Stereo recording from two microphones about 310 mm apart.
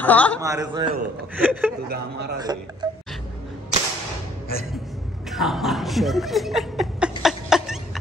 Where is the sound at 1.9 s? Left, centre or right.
Right.